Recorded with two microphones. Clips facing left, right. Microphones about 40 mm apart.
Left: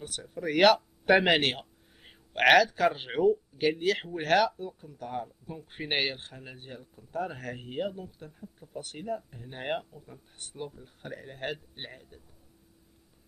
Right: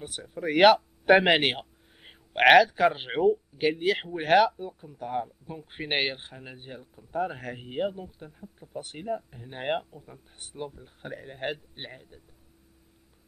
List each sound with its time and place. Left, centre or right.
0.0 s a man's voice: centre